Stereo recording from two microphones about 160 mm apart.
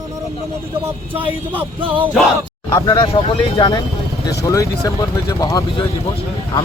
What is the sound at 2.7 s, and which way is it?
Speech, 35° left (ahead or behind).